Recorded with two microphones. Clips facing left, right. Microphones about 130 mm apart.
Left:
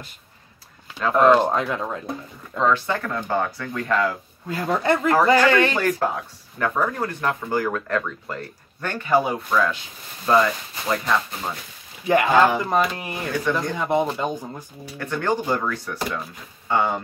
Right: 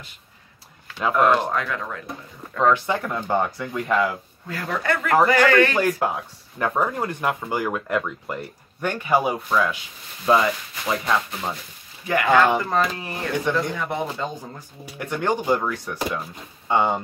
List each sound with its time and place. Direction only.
1.1 s speech: 25° left (ahead or behind)
2.6 s speech: 15° right (ahead or behind)
4.5 s speech: 25° left (ahead or behind)
5.8 s speech: 10° right (ahead or behind)
12.1 s speech: 20° left (ahead or behind)
15.0 s speech: 15° right (ahead or behind)